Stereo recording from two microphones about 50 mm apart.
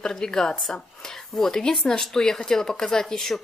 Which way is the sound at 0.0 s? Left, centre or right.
Centre.